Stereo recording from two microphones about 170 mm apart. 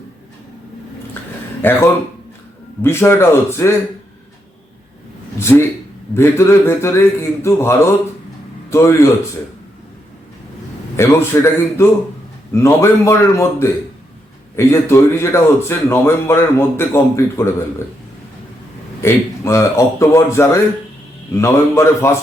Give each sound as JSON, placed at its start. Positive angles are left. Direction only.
{"t": 1.6, "sound": "a man's voice", "side_deg": 10}
{"t": 5.4, "sound": "a man's voice", "side_deg": 15}
{"t": 10.9, "sound": "a man's voice", "side_deg": 15}
{"t": 19.0, "sound": "a man's voice", "side_deg": 15}